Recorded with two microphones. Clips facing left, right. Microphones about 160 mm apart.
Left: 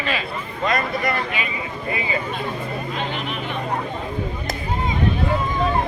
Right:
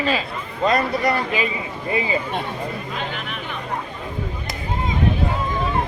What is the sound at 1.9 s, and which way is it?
Speech, 25° right (ahead or behind).